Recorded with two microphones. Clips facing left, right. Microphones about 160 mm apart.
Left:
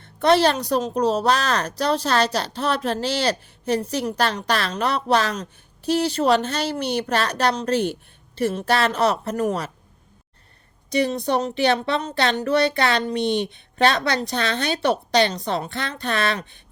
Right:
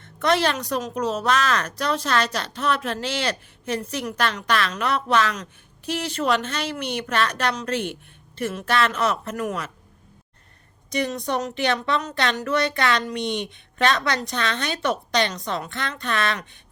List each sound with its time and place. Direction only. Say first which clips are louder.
0.0 s a woman's voice: left 4 dB; 35° left (ahead or behind)
10.8 s a woman's voice: left 4 dB; 30° left (ahead or behind)